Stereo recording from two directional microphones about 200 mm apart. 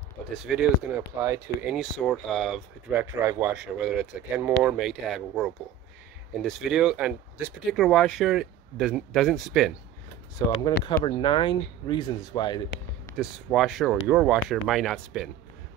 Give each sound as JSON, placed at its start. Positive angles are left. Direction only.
{"t": 0.5, "sound": "speech", "side_deg": -5}
{"t": 10.4, "sound": "speech", "side_deg": 15}
{"t": 11.1, "sound": "speech", "side_deg": 25}
{"t": 13.1, "sound": "speech", "side_deg": 0}